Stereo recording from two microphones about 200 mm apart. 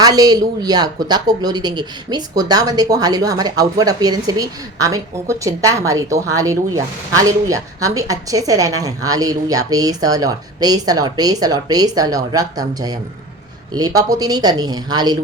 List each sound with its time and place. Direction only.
0.0 s speech: 20° right (ahead or behind)